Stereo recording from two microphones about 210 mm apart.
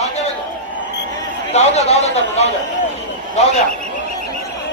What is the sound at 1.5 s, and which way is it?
Speech, 30° left (ahead or behind).